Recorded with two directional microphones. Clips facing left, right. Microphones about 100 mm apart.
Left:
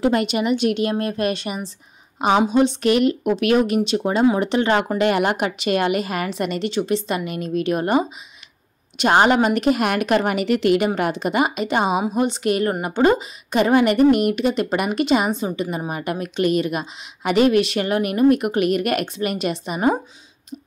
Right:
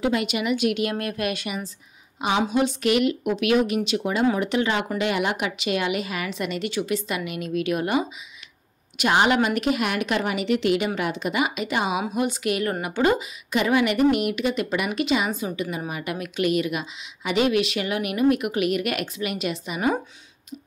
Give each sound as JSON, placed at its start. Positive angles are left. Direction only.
{"t": 0.0, "sound": "a woman's voice", "side_deg": 40}
{"t": 2.1, "sound": "a woman's voice", "side_deg": 40}
{"t": 4.6, "sound": "a woman's voice", "side_deg": 50}